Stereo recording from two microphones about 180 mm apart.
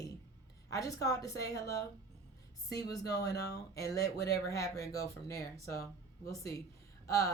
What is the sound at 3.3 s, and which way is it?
Speech, 65° left (ahead or behind).